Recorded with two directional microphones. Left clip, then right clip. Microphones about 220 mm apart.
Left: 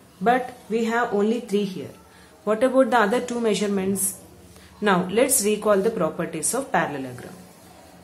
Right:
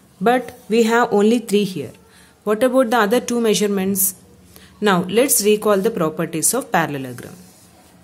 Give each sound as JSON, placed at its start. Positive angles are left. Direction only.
{"t": 0.2, "sound": "speech", "side_deg": -45}